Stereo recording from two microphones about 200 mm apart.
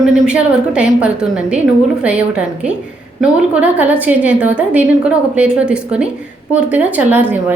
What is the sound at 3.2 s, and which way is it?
A woman's voice, 5° right (ahead or behind).